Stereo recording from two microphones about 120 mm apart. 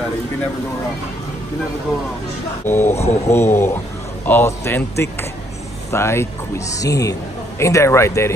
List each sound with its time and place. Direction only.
2.6 s a man's voice: 20° left (ahead or behind)